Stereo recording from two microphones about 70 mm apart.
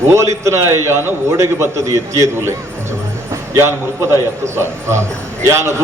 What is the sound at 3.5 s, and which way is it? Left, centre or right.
A man's voice, right.